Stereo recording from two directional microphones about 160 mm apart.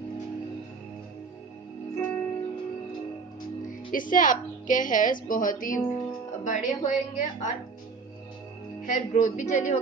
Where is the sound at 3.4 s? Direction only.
60° left (ahead or behind).